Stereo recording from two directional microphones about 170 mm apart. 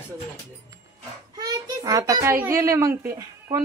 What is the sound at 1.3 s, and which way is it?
Child singing, 20° right (ahead or behind).